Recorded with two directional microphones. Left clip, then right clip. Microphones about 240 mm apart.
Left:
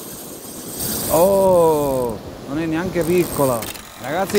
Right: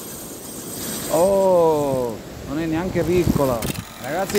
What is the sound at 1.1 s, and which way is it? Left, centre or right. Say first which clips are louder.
Speech: left 2 dB; centre.